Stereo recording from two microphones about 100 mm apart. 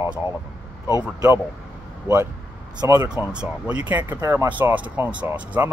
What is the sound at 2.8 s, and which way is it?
Speech, 30° right (ahead or behind).